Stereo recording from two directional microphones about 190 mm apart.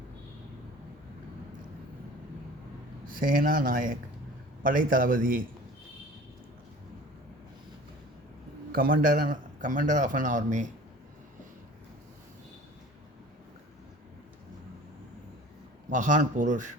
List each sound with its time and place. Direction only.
3.1 s a man's voice: 45° right (ahead or behind)
8.7 s a man's voice: 50° right (ahead or behind)
15.9 s speech: 40° right (ahead or behind)